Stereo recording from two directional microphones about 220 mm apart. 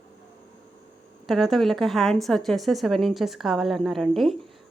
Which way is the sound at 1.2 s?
Centre (ahead or behind).